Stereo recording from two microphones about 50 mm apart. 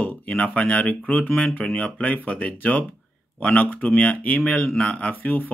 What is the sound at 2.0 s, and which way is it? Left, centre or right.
Speech, left.